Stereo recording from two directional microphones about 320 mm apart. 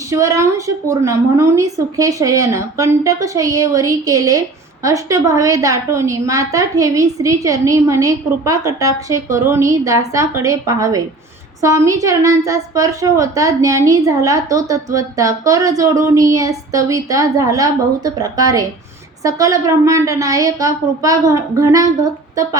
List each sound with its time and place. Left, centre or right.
0.1 s a woman's voice: centre